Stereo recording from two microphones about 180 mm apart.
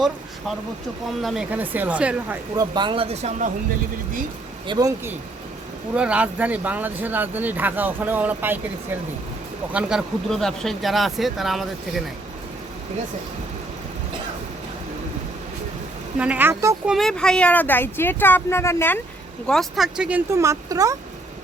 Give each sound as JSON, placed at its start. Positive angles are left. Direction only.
{"t": 1.2, "sound": "speech", "side_deg": -5}
{"t": 2.6, "sound": "speech", "side_deg": -25}
{"t": 4.6, "sound": "speech", "side_deg": -25}
{"t": 5.9, "sound": "speech", "side_deg": -5}
{"t": 9.7, "sound": "speech", "side_deg": 0}
{"t": 16.1, "sound": "speech", "side_deg": -5}
{"t": 16.9, "sound": "speech", "side_deg": 0}
{"t": 19.5, "sound": "speech", "side_deg": 0}